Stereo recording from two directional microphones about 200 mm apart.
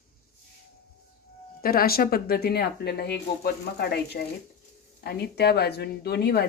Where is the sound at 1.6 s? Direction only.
50° left (ahead or behind).